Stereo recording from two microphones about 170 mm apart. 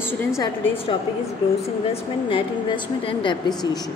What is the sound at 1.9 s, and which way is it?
A woman's voice, 30° left (ahead or behind).